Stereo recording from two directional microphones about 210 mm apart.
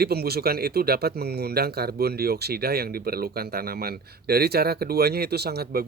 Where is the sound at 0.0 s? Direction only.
50° right (ahead or behind).